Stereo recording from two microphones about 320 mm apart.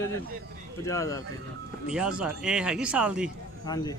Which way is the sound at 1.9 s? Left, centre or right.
Centre.